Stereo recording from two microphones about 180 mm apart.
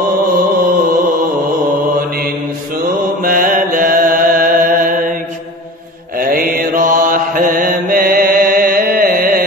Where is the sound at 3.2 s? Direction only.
50° right (ahead or behind).